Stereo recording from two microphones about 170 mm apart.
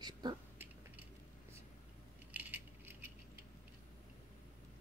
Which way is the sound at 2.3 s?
10° right (ahead or behind).